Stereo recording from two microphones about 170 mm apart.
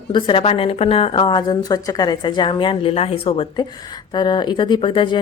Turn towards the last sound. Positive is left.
turn(degrees=30)  # may be behind; listen again after turning